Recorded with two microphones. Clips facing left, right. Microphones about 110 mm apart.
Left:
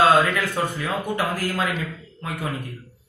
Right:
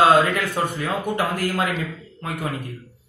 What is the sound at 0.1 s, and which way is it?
Speech, 15° right (ahead or behind).